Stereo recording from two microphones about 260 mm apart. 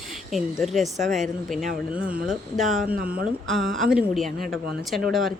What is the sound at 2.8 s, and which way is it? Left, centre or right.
Speech, right.